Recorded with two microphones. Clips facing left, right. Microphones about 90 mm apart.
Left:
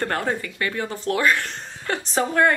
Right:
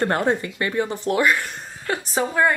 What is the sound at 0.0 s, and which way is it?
Speech, 20° right (ahead or behind).